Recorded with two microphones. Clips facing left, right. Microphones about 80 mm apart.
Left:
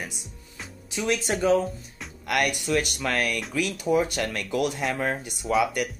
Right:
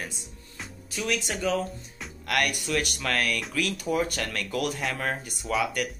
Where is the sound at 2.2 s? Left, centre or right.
Centre.